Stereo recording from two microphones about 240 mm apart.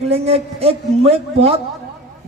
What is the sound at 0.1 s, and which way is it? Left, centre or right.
Speech, right.